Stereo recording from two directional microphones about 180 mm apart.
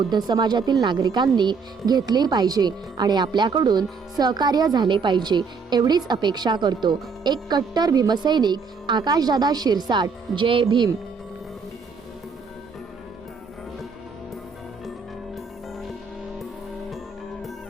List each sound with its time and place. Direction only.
0.1 s speech: 25° right (ahead or behind)